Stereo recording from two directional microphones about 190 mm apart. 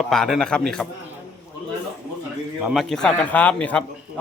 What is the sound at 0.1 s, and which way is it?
Speech, centre (ahead or behind).